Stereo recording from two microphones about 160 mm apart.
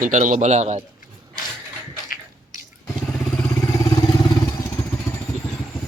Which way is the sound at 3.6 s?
20° left (ahead or behind).